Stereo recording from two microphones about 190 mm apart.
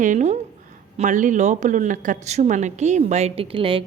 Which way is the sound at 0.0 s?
40° right (ahead or behind).